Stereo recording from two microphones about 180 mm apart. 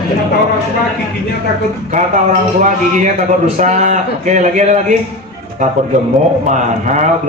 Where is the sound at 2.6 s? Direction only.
45° right (ahead or behind).